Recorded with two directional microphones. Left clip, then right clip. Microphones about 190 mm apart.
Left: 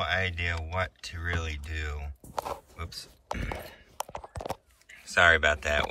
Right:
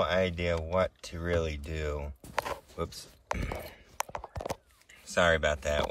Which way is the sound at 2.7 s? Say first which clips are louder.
Right 4 dB; 15° right (ahead or behind).